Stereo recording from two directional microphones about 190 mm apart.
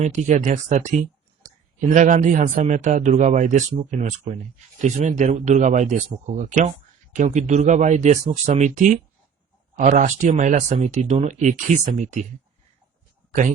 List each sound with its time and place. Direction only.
0.0 s speech: 40° right (ahead or behind)